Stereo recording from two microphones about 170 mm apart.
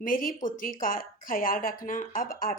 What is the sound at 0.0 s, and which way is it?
A woman's voice, 55° left (ahead or behind).